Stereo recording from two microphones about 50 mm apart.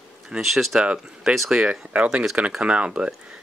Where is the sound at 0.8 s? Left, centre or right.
Centre.